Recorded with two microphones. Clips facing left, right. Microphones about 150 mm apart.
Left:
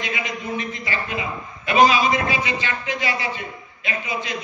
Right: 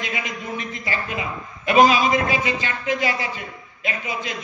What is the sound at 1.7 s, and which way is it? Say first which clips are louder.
A man's voice: right 1 dB; 45° right (ahead or behind).